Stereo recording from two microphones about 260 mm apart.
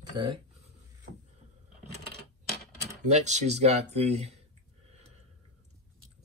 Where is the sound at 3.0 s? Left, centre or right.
Right.